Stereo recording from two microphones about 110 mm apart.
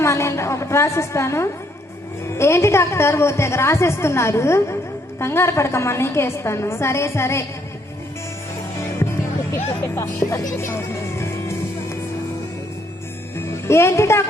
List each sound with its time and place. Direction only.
0.0 s a woman's voice: 25° left (ahead or behind)
9.8 s music: 25° left (ahead or behind)
13.7 s a woman's voice: 25° left (ahead or behind)